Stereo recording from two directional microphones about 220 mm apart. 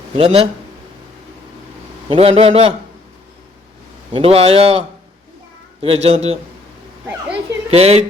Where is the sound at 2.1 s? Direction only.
25° right (ahead or behind).